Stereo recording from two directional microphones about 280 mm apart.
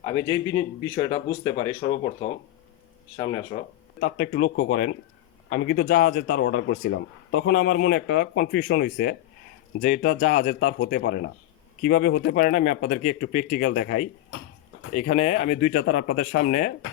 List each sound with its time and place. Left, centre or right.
0.0 s speech: centre
3.5 s speech: left